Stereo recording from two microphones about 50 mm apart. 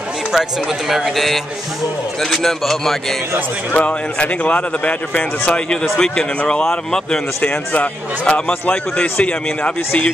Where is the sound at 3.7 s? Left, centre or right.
Left; by 7.4 s centre.